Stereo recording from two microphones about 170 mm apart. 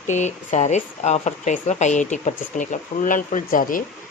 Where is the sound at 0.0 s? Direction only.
45° left (ahead or behind).